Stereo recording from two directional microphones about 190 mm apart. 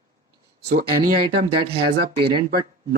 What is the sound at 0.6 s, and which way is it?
Speech, 55° right (ahead or behind).